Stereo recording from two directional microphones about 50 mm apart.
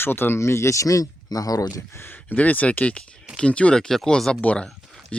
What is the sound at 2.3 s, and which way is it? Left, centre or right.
Speech, left.